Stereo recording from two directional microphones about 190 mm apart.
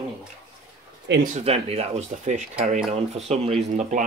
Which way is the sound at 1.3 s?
35° right (ahead or behind).